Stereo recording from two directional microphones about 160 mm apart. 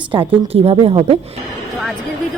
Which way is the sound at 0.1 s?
35° right (ahead or behind).